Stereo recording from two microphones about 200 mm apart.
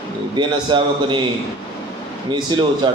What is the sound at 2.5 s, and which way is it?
Speech, 20° right (ahead or behind).